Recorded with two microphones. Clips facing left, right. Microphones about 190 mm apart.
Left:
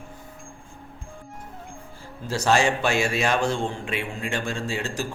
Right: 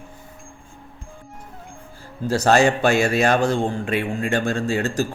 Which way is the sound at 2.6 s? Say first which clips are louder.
Right 5 dB; 55° right (ahead or behind).